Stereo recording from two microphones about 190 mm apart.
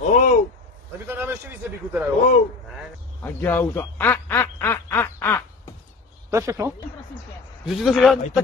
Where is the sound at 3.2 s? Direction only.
10° left (ahead or behind).